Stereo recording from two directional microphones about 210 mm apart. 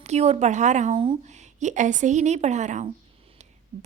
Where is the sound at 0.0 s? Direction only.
30° right (ahead or behind).